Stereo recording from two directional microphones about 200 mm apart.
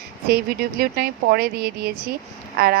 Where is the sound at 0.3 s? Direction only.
50° right (ahead or behind).